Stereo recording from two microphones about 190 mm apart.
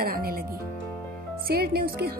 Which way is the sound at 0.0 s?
50° right (ahead or behind).